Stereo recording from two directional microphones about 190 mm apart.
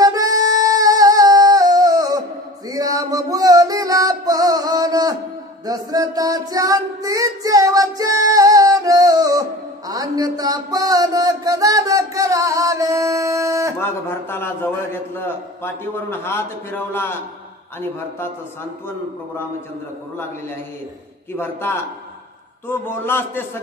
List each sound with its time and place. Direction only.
0.0 s music: 20° right (ahead or behind)
5.7 s child singing: 20° right (ahead or behind)
13.7 s a man's voice: 10° left (ahead or behind)
21.4 s a man's voice: 10° left (ahead or behind)